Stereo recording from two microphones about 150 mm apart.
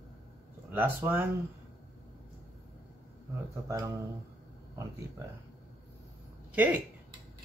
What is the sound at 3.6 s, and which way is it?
Speech, 20° right (ahead or behind).